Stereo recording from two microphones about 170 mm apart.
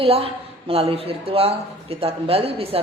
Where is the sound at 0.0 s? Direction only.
35° right (ahead or behind).